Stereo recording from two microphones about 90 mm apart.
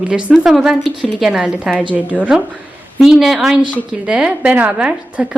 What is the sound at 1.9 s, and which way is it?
A woman's voice, 15° right (ahead or behind).